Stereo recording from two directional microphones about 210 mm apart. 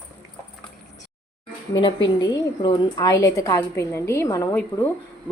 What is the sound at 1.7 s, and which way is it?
A woman's voice, 20° left (ahead or behind).